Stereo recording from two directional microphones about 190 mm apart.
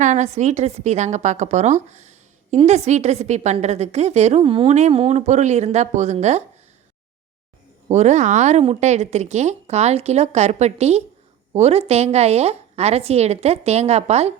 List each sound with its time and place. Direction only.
0.0 s a woman's voice: 40° right (ahead or behind)
7.9 s a woman's voice: 35° right (ahead or behind)